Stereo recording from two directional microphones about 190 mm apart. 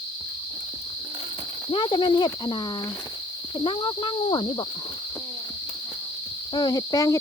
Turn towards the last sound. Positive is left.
turn(degrees=20)  # may be behind; listen again after turning